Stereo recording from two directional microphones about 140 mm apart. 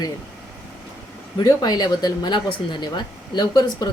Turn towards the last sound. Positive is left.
turn(degrees=30)  # may be behind; listen again after turning